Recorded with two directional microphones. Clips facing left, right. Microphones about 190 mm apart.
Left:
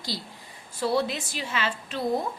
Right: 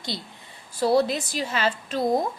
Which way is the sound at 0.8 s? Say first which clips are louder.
Right 5 dB; 40° right (ahead or behind).